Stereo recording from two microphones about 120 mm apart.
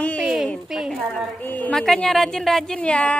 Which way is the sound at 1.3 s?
15° left (ahead or behind).